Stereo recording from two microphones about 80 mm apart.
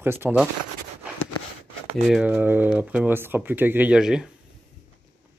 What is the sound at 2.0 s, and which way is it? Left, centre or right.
Speech, centre.